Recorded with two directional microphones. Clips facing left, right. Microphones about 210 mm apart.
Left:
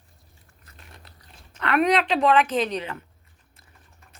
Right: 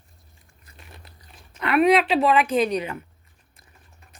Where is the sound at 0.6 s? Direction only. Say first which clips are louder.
Right 2 dB; 10° right (ahead or behind).